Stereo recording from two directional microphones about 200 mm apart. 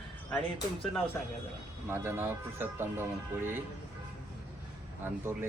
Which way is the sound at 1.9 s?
10° right (ahead or behind).